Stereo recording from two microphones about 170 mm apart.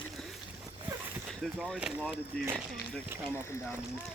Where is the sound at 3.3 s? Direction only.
15° left (ahead or behind).